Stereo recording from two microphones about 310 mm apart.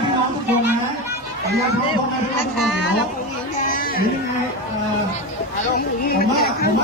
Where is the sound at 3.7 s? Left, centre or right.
Left.